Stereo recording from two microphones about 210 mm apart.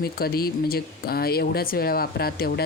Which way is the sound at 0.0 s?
45° left (ahead or behind).